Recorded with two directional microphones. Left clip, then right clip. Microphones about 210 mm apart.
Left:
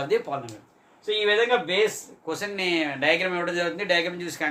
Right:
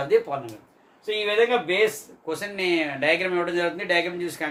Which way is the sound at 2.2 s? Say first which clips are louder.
Right 1 dB; 20° left (ahead or behind).